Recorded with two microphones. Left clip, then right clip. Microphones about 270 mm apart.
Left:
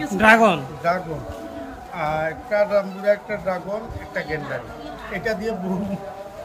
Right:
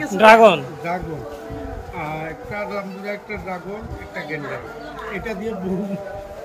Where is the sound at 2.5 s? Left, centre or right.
Left.